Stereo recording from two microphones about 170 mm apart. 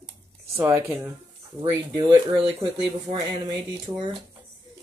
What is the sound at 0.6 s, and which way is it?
Speech, 15° right (ahead or behind).